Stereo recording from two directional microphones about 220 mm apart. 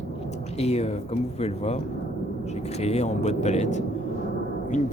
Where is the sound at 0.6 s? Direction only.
30° left (ahead or behind).